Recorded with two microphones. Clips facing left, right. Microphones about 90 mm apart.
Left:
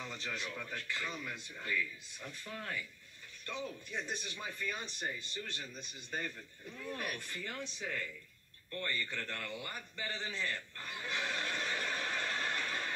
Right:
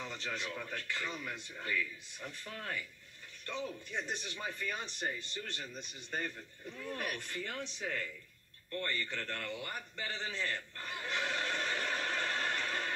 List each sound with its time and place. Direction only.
0.0 s speech: centre (ahead or behind)
6.7 s speech: centre (ahead or behind)
8.7 s speech: 5° left (ahead or behind)
9.8 s a sound: centre (ahead or behind)